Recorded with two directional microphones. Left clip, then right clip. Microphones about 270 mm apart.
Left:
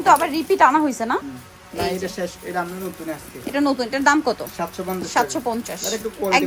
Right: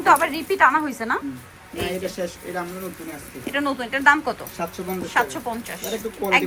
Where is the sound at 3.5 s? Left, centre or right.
Centre.